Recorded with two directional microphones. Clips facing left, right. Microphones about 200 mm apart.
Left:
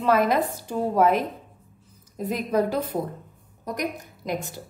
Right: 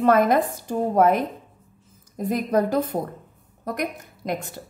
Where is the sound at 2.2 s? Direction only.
45° right (ahead or behind).